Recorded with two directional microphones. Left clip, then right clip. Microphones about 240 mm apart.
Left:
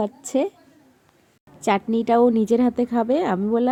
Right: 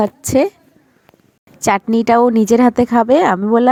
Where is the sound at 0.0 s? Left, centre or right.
Right.